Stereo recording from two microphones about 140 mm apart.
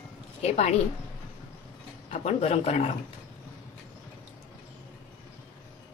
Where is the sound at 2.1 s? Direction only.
50° left (ahead or behind).